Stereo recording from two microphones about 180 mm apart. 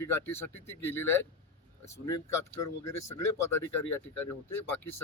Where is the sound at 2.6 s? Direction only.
15° left (ahead or behind).